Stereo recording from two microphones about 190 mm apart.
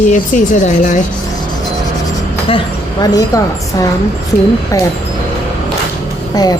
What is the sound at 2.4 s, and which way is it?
A woman's voice, 25° left (ahead or behind).